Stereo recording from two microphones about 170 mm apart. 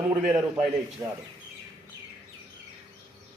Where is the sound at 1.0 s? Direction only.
20° right (ahead or behind).